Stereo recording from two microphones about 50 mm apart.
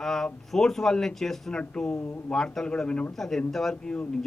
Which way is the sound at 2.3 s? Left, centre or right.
Centre.